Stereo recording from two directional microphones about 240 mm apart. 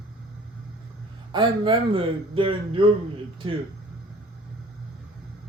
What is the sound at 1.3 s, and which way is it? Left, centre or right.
A man's voice, centre.